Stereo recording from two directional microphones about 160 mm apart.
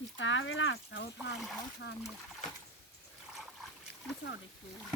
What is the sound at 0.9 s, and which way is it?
Speech, 90° left.